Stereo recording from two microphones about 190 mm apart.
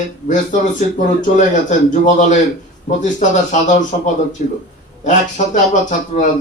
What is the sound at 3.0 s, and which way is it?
A man's voice, 40° left (ahead or behind).